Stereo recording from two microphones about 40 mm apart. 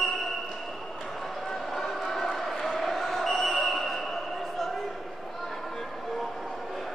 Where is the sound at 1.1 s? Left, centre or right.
Centre.